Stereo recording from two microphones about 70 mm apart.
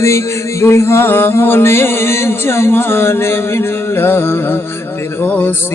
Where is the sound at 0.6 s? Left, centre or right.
Left.